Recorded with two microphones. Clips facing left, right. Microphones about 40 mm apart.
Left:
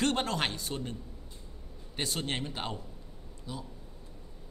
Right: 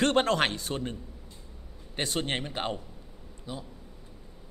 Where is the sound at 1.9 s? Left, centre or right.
Right.